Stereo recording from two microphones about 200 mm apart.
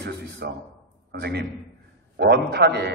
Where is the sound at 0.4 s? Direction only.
55° right (ahead or behind).